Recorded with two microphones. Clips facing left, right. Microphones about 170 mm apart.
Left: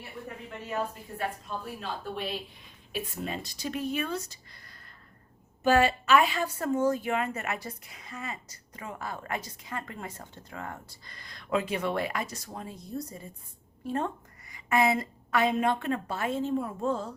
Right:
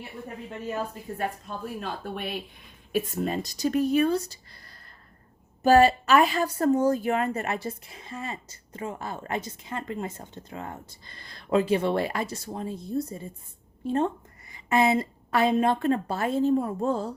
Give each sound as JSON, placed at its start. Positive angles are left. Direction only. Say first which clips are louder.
{"t": 1.8, "sound": "speech", "louder": "right 2 dB", "side_deg": -55}
{"t": 2.9, "sound": "a woman's voice", "louder": "right 8 dB", "side_deg": -45}